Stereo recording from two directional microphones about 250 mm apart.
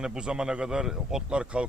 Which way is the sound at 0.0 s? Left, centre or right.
Centre.